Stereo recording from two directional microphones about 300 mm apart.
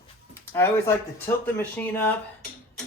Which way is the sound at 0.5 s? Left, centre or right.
Centre.